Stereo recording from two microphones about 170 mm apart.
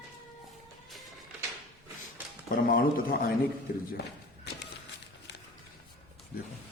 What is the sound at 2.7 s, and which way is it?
Speech, 65° left (ahead or behind).